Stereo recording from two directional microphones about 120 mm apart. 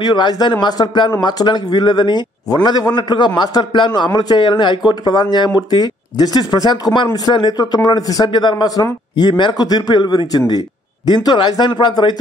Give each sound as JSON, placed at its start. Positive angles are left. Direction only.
{"t": 0.0, "sound": "a man's voice", "side_deg": 40}